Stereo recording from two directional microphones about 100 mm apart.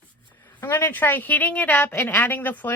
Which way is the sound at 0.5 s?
25° left (ahead or behind).